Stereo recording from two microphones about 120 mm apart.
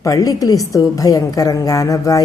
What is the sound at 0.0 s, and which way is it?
A woman's voice, 30° left (ahead or behind).